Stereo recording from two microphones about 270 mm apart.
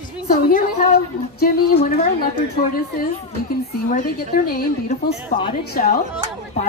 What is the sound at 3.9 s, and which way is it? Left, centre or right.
Speech, left.